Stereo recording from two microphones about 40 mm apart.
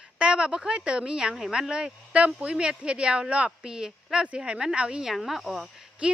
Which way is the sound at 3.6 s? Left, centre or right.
Centre.